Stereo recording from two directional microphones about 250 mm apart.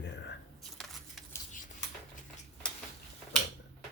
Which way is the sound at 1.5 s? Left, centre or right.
Left.